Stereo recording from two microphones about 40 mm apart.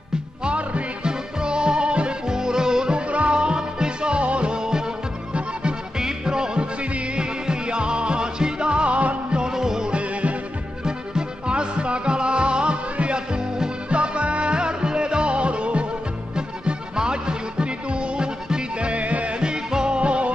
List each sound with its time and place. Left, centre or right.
0.4 s music: right
9.4 s music: centre
9.9 s music: right
10.8 s music: centre
19.4 s music: centre
20.0 s music: right